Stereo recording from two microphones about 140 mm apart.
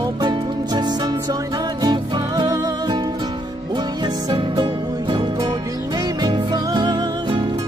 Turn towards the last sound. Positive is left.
turn(degrees=-30)  # may be behind; listen again after turning